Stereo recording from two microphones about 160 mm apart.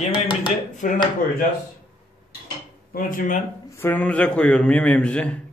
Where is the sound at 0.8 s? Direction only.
60° left (ahead or behind).